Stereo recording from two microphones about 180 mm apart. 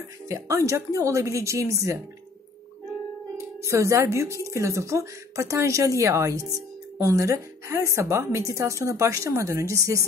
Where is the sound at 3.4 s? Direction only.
15° right (ahead or behind).